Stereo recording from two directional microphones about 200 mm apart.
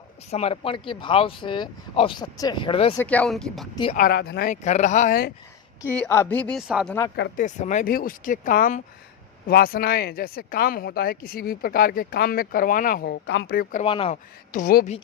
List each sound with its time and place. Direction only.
0.3 s speech: 30° left (ahead or behind)
3.0 s speech: 5° left (ahead or behind)
3.9 s speech: 45° left (ahead or behind)
4.6 s speech: 35° left (ahead or behind)
5.8 s speech: 10° left (ahead or behind)
7.3 s speech: 35° left (ahead or behind)
13.8 s speech: 25° left (ahead or behind)
14.5 s speech: 45° left (ahead or behind)